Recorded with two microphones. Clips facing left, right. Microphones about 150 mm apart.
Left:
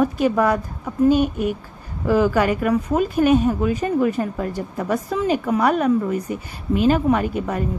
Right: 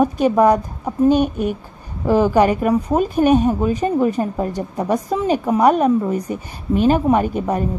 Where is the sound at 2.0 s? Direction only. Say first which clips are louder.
Right 3 dB; 20° right (ahead or behind).